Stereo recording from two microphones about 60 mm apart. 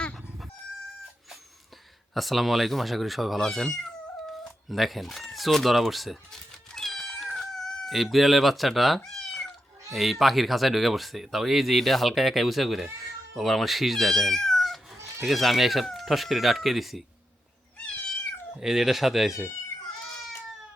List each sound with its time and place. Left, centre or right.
2.1 s speech: centre
9.0 s cat: centre
9.9 s speech: centre
17.7 s cat: centre
18.6 s speech: centre